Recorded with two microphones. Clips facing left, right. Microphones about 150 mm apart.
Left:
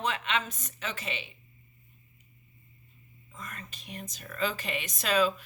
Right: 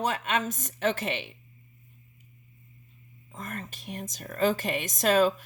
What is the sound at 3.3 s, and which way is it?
A woman's voice, 50° right (ahead or behind).